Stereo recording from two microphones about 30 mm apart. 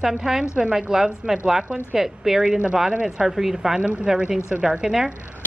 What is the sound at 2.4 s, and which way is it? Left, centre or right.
A woman's voice, right.